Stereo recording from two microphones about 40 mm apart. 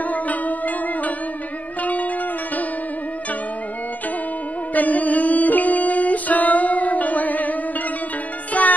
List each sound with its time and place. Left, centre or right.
0.0 s music: left
4.7 s music: left
8.6 s music: left